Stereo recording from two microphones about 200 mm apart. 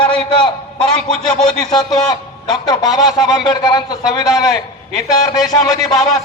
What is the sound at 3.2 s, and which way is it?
A man's voice, 20° left (ahead or behind).